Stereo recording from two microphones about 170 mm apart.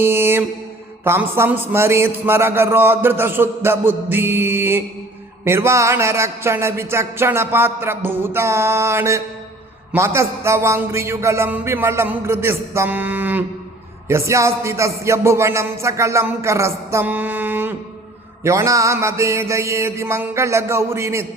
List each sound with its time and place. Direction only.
0.0 s music: 15° right (ahead or behind)
1.0 s a man's voice: 15° right (ahead or behind)